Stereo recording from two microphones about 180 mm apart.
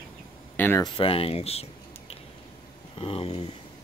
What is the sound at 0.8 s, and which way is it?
Speech, 30° left (ahead or behind).